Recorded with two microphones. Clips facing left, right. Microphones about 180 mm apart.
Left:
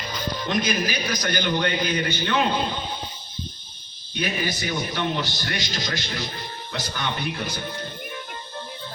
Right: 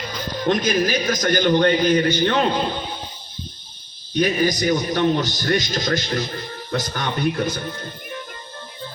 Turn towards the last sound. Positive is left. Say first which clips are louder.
# right 7 dB
turn(degrees=-45)  # may be behind; listen again after turning